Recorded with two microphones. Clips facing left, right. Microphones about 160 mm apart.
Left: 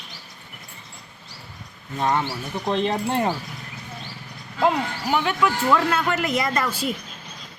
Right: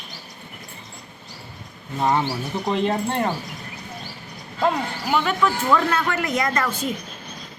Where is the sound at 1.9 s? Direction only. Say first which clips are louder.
Right 2 dB; 10° right (ahead or behind).